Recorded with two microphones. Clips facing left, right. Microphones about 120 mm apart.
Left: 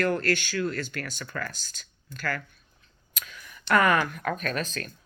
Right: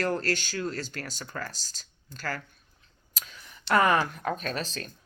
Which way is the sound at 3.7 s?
30° right (ahead or behind).